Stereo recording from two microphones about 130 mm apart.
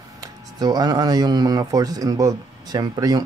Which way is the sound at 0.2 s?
30° right (ahead or behind).